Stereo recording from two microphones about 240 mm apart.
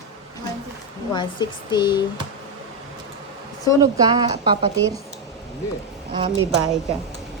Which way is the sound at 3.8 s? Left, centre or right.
Centre.